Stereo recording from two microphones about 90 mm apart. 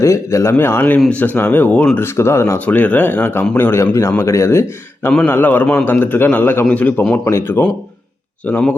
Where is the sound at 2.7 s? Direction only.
15° left (ahead or behind).